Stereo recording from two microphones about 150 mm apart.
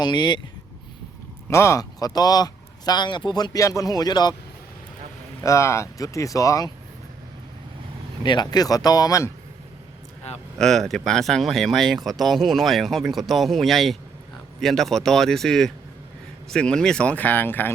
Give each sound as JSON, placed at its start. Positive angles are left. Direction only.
{"t": 0.0, "sound": "speech", "side_deg": 30}
{"t": 1.5, "sound": "speech", "side_deg": 20}
{"t": 5.4, "sound": "speech", "side_deg": 20}
{"t": 8.2, "sound": "speech", "side_deg": 30}
{"t": 10.6, "sound": "speech", "side_deg": 0}